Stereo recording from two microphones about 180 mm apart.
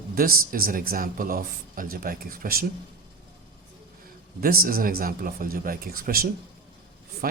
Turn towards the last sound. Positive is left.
turn(degrees=-55)  # may be behind; listen again after turning